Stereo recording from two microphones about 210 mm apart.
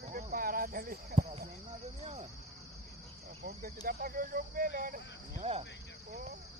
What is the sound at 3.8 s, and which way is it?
Speech, 45° right (ahead or behind).